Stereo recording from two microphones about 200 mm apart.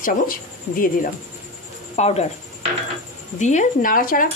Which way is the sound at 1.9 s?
30° left (ahead or behind).